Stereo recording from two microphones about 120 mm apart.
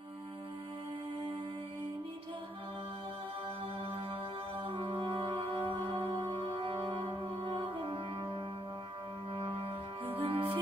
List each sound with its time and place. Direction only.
4.6 s music: 45° right (ahead or behind)